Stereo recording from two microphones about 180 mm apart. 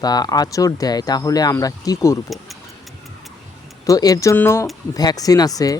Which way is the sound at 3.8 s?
20° left (ahead or behind).